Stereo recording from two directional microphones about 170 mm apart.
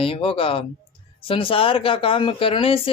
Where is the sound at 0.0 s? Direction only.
30° left (ahead or behind).